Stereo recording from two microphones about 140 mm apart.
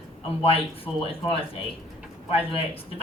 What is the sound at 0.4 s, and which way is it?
Speech, 40° left (ahead or behind).